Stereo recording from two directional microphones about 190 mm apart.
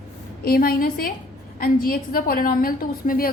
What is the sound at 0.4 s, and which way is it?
A woman's voice, 50° left (ahead or behind).